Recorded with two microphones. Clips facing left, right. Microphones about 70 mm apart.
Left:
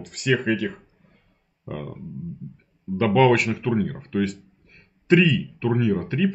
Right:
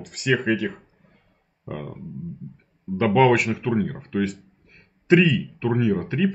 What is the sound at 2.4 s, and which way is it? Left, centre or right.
Guitar, right.